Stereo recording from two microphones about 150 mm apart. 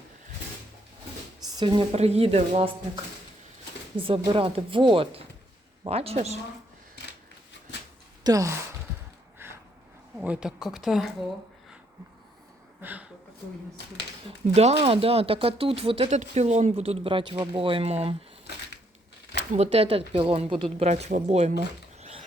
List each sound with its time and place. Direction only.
1.5 s a woman's voice: 30° right (ahead or behind)
1.9 s speech: 45° right (ahead or behind)
3.9 s speech: 35° right (ahead or behind)
8.2 s speech: 25° right (ahead or behind)
9.4 s a sound: 15° right (ahead or behind)
10.2 s speech: 5° right (ahead or behind)
12.8 s speech: 10° right (ahead or behind)
14.3 s speech: 45° right (ahead or behind)
19.5 s speech: 40° right (ahead or behind)